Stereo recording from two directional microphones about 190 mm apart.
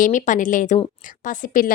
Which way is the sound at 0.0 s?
40° left (ahead or behind).